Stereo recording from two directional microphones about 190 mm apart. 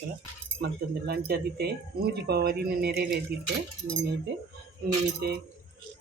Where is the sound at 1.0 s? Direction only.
55° right (ahead or behind).